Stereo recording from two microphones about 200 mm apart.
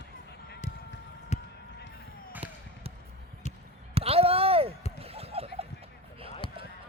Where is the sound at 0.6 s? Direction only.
35° left (ahead or behind).